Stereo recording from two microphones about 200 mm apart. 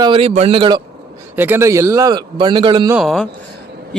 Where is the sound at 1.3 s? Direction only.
10° right (ahead or behind).